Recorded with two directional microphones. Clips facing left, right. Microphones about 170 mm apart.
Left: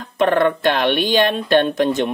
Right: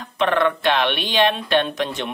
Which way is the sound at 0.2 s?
45° left (ahead or behind).